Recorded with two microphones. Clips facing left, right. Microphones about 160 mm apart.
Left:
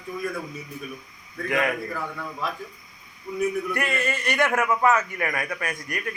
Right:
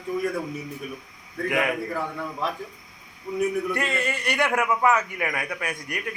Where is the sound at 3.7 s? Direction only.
20° right (ahead or behind).